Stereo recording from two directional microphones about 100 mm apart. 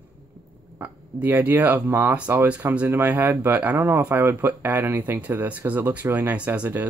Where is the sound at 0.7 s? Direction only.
15° right (ahead or behind).